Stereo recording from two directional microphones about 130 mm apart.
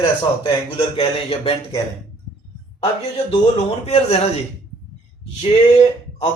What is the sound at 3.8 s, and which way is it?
Speech, 50° left (ahead or behind).